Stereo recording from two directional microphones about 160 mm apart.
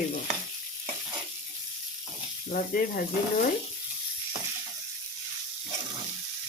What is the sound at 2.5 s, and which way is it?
Frying, 60° left (ahead or behind).